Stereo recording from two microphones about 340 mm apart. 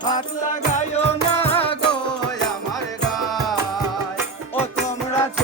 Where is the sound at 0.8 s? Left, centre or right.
Centre.